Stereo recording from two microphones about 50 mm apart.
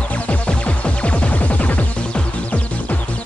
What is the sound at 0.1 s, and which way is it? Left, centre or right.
Music, left.